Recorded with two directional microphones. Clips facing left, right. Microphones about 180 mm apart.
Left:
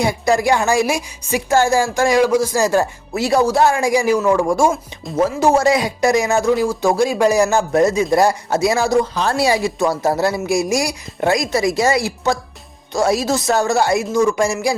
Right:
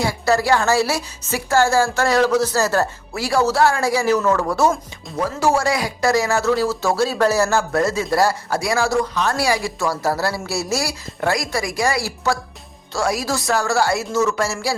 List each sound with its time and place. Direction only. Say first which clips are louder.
0.0 s a woman's voice: left 3 dB; 15° left (ahead or behind)